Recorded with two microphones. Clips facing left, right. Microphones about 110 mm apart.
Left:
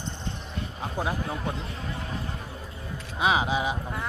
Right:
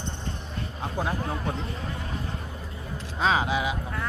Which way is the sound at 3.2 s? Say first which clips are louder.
Even; 15° left (ahead or behind).